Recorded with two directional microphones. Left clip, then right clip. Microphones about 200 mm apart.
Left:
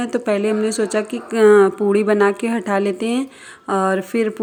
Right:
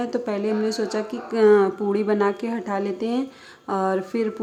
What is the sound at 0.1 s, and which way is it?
Speech, 15° left (ahead or behind).